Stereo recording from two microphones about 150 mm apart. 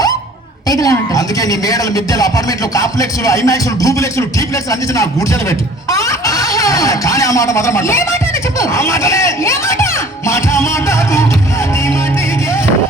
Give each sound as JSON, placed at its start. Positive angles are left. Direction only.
{"t": 0.7, "sound": "a woman's voice", "side_deg": 25}